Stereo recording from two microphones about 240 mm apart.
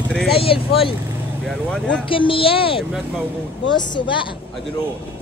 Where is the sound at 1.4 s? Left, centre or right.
Centre.